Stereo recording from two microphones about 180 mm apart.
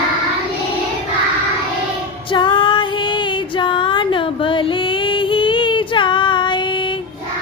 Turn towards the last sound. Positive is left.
turn(degrees=25)  # may be behind; listen again after turning